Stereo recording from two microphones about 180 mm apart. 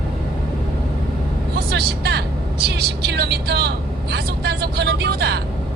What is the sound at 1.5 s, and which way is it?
Vehicle, 60° right (ahead or behind).